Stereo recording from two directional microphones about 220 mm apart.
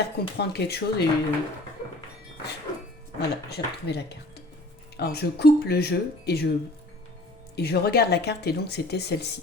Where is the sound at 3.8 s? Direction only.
50° left (ahead or behind).